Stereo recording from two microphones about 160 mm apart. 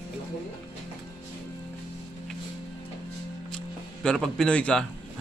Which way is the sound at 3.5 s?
5° left (ahead or behind).